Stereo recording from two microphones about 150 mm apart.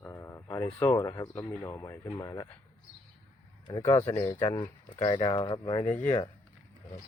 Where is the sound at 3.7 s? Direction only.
20° left (ahead or behind).